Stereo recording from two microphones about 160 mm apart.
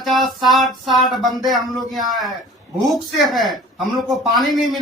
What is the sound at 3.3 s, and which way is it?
Speech, centre (ahead or behind).